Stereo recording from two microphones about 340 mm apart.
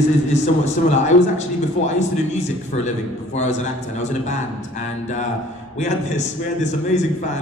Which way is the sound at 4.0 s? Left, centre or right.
Left.